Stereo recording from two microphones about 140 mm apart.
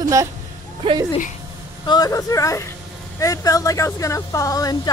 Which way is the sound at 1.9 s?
25° left (ahead or behind).